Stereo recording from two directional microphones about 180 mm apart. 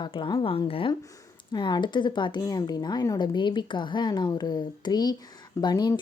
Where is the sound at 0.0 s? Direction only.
25° left (ahead or behind).